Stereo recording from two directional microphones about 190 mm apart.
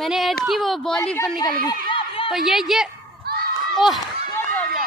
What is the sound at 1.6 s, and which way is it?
Chatter, 25° left (ahead or behind).